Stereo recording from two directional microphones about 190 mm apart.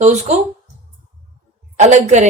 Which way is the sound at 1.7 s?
40° right (ahead or behind).